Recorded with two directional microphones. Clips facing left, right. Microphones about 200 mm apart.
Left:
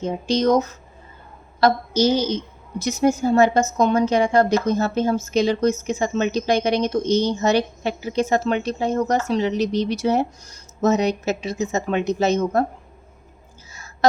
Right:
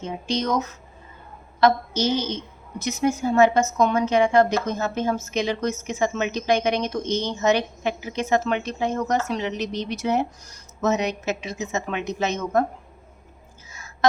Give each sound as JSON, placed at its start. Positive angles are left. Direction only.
{"t": 0.0, "sound": "a woman's voice", "side_deg": 35}